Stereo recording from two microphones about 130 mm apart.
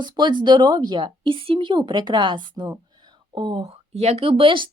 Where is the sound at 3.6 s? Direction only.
55° right (ahead or behind).